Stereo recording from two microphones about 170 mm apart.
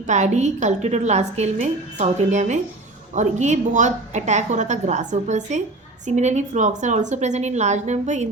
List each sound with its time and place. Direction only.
0.1 s a woman's voice: 45° right (ahead or behind)